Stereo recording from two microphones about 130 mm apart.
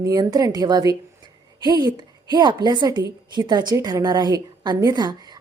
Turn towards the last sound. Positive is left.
turn(degrees=-30)  # may be behind; listen again after turning